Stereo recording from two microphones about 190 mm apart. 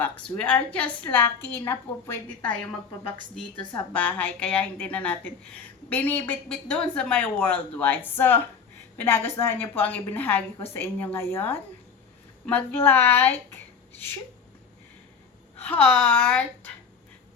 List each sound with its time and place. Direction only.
0.0 s a woman's voice: 5° left (ahead or behind)
3.3 s a woman's voice: 25° left (ahead or behind)
3.7 s a woman's voice: 5° left (ahead or behind)
15.5 s a woman's voice: 10° left (ahead or behind)